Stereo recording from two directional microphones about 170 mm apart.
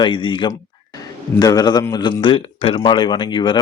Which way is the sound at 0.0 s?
30° left (ahead or behind).